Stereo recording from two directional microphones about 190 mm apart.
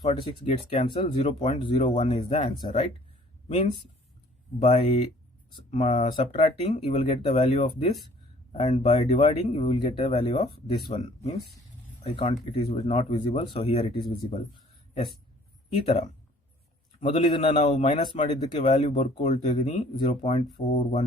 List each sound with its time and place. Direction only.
0.0 s speech: 35° left (ahead or behind)
4.6 s speech: 35° left (ahead or behind)
17.0 s speech: 30° left (ahead or behind)